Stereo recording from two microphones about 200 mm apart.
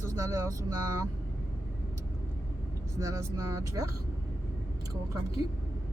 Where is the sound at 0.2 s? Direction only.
15° right (ahead or behind).